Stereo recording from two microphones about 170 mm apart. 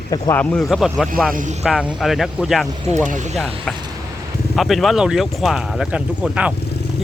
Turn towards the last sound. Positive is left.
turn(degrees=-5)  # may be behind; listen again after turning